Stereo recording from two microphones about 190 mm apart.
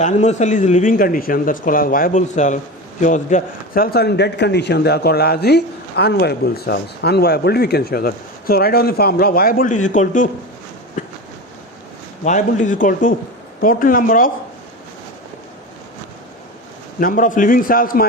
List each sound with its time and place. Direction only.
0.0 s a man's voice: 40° left (ahead or behind)
11.0 s a sound: 40° left (ahead or behind)
12.2 s a man's voice: 40° left (ahead or behind)
17.0 s a man's voice: 45° left (ahead or behind)